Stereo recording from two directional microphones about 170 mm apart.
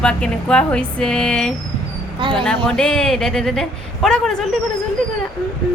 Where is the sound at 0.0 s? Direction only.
5° left (ahead or behind).